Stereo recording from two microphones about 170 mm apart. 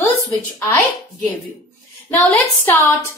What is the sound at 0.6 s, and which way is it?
Speech, 15° left (ahead or behind).